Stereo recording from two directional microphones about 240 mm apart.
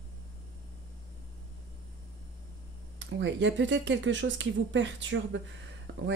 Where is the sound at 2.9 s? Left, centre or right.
Right.